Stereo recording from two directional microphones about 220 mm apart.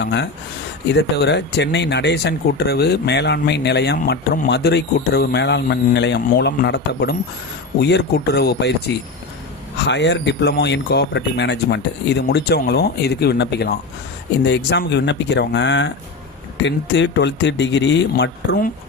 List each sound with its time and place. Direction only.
0.0 s speech: 50° left (ahead or behind)